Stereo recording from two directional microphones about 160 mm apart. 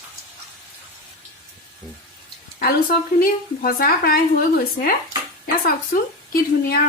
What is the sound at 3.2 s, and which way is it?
A woman's voice, 65° left (ahead or behind).